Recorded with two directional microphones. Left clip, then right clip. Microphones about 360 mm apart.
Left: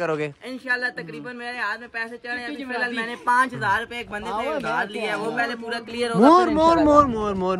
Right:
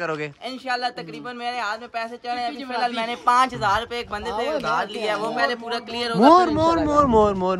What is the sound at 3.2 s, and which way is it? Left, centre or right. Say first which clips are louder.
Speech: right 2 dB; centre.